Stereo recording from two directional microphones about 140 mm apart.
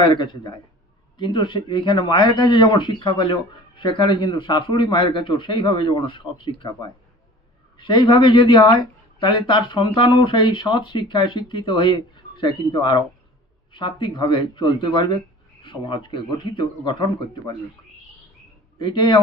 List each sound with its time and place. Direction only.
0.0 s a man's voice: 35° left (ahead or behind)
18.8 s a man's voice: 35° left (ahead or behind)